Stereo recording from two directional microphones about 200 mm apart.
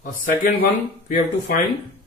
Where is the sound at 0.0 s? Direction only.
40° left (ahead or behind).